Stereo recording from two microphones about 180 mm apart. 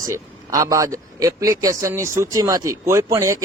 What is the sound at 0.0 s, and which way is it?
A man's voice, 20° right (ahead or behind).